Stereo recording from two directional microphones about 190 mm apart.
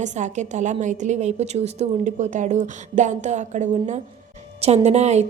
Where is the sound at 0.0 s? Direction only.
40° right (ahead or behind).